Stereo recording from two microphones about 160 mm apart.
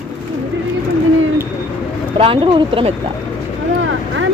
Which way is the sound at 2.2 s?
30° right (ahead or behind).